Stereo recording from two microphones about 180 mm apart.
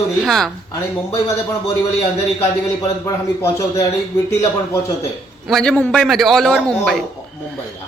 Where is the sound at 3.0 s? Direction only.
15° left (ahead or behind).